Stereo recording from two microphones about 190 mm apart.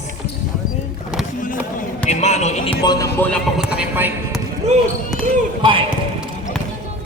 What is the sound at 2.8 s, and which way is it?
Speech, 20° left (ahead or behind).